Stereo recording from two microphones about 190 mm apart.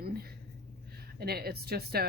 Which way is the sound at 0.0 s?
55° right (ahead or behind).